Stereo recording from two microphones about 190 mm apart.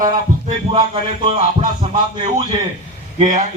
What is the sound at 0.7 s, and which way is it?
A man's voice, 30° right (ahead or behind).